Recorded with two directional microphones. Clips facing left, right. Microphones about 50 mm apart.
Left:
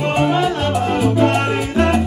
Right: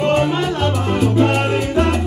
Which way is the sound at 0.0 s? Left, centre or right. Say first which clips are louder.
Even; centre.